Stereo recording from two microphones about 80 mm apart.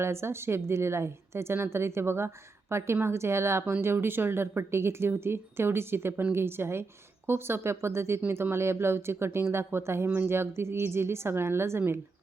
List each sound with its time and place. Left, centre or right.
0.0 s a woman's voice: right